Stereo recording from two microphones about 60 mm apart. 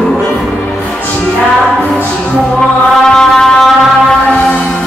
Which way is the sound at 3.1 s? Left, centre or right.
Centre.